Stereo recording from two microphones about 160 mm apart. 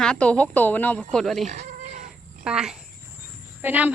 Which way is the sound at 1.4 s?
45° right (ahead or behind).